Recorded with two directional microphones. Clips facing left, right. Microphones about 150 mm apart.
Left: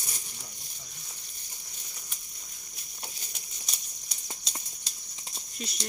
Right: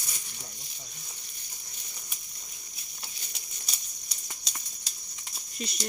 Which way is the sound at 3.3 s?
Centre (ahead or behind).